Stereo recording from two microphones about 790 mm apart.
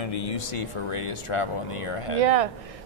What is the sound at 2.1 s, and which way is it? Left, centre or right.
Speech, right.